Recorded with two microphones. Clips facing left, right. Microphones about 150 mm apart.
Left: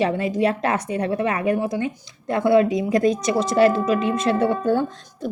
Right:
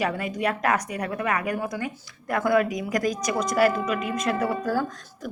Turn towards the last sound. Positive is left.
turn(degrees=25)  # may be behind; listen again after turning